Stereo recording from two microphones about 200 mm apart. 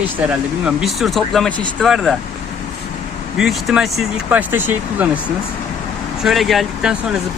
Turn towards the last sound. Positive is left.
turn(degrees=0)  # may be behind; listen again after turning